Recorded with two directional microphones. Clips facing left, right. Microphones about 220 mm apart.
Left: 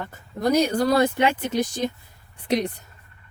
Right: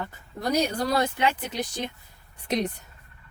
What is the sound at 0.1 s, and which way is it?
Speech, 50° left (ahead or behind).